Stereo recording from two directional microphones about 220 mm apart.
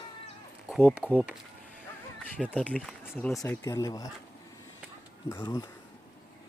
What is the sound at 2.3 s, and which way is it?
Speech, 5° left (ahead or behind).